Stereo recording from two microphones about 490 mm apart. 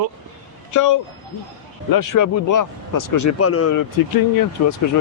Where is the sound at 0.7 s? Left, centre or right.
Left.